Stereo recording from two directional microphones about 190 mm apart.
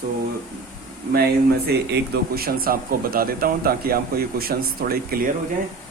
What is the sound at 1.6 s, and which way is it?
Speech, 55° right (ahead or behind).